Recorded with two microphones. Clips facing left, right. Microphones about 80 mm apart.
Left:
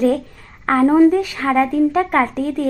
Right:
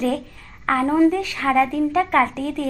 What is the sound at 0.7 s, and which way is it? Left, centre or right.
Speech, left.